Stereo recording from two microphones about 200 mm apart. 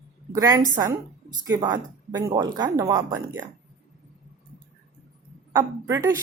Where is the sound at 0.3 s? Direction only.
15° right (ahead or behind).